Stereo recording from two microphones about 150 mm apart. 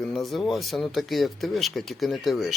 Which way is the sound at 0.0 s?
Centre (ahead or behind).